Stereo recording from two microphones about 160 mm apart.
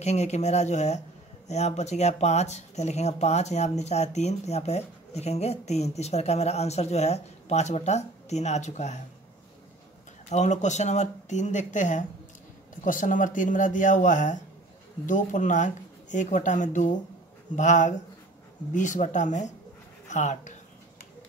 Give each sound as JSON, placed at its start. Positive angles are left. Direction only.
{"t": 0.0, "sound": "speech", "side_deg": 45}
{"t": 10.3, "sound": "speech", "side_deg": 45}